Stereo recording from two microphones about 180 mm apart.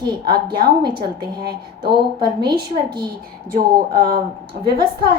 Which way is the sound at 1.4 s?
65° right (ahead or behind).